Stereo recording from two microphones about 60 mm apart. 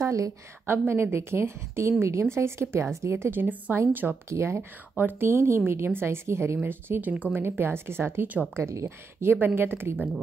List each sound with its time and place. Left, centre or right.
0.0 s a woman's voice: right
0.7 s a woman's voice: right
4.3 s a woman's voice: right
4.9 s speech: right
5.3 s a woman's voice: right
6.6 s speech: right
7.3 s a woman's voice: right